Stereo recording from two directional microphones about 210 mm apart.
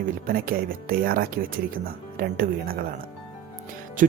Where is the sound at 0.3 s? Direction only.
45° right (ahead or behind).